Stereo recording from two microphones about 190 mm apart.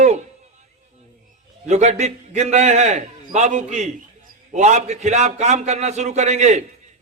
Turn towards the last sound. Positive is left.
turn(degrees=-35)  # may be behind; listen again after turning